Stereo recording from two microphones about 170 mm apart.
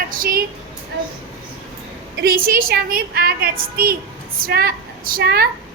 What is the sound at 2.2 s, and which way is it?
A woman's voice, 60° right (ahead or behind).